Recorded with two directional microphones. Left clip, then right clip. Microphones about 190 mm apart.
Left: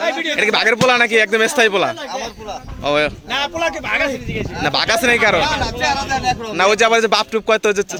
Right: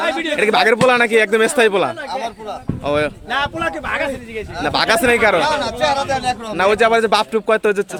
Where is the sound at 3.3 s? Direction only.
60° right (ahead or behind).